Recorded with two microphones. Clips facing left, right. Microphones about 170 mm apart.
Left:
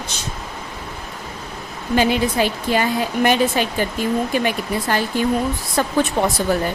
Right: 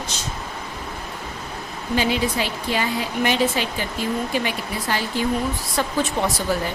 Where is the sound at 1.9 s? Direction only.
50° left (ahead or behind).